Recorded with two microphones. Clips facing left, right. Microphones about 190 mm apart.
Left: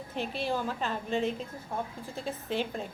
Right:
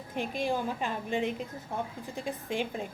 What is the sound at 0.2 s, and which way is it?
A woman's voice, 15° right (ahead or behind).